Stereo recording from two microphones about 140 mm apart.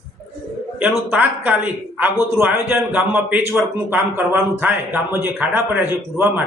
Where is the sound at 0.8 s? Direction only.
10° right (ahead or behind).